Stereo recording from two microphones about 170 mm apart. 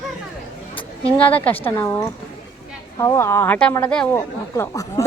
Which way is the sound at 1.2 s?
10° left (ahead or behind).